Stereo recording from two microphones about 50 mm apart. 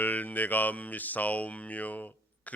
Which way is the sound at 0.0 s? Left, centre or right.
Left.